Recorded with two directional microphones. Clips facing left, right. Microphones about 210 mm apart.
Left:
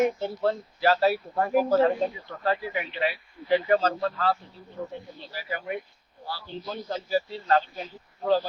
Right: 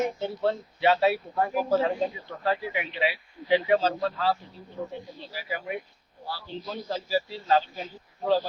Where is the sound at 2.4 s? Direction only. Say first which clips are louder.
Left 1 dB; centre (ahead or behind).